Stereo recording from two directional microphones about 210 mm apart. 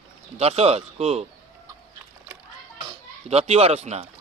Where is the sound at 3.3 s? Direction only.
30° right (ahead or behind).